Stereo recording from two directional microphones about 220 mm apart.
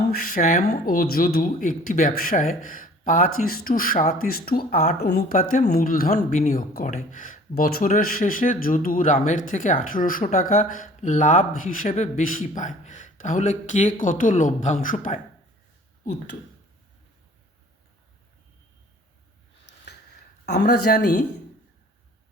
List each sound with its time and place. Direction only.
0.0 s speech: 40° left (ahead or behind)
20.4 s speech: 45° left (ahead or behind)